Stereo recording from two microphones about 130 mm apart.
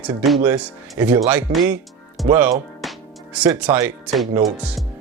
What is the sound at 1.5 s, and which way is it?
Speech, 35° right (ahead or behind).